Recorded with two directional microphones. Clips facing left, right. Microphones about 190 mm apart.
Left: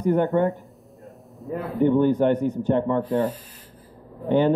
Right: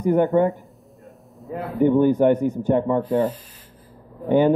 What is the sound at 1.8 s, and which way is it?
A man's voice, 10° right (ahead or behind).